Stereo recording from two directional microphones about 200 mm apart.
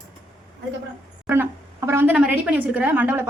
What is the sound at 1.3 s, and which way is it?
A woman's voice, 10° right (ahead or behind).